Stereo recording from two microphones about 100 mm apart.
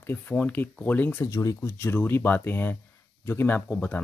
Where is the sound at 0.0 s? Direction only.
15° left (ahead or behind).